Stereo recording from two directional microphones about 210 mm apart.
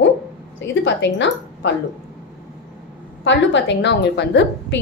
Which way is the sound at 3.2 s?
60° left (ahead or behind).